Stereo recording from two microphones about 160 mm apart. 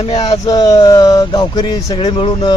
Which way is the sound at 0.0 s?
35° left (ahead or behind).